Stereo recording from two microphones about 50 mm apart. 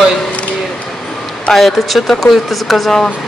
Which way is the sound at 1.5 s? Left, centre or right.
Centre.